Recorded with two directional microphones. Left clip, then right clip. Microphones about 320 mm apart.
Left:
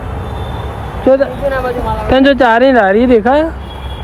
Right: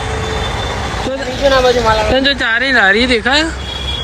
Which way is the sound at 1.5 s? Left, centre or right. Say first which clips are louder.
Right 5 dB; right.